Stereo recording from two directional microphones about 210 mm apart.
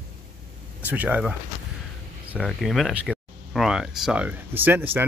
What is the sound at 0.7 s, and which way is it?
Speech, 5° right (ahead or behind).